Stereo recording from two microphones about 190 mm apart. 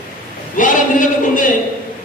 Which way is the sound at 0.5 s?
45° left (ahead or behind).